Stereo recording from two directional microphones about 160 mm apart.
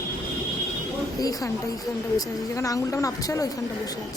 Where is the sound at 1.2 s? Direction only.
20° left (ahead or behind).